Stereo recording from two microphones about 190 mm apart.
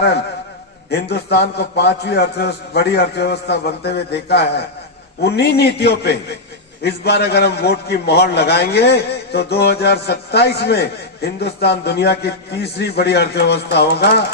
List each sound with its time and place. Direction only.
0.9 s a man's voice: 60° left (ahead or behind)